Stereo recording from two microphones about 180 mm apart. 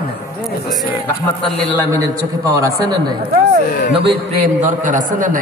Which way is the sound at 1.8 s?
20° right (ahead or behind).